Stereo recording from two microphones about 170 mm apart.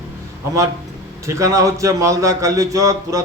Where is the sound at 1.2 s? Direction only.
20° right (ahead or behind).